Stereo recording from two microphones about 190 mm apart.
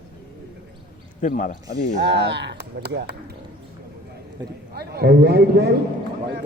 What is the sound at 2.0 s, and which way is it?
Speech, 65° right (ahead or behind).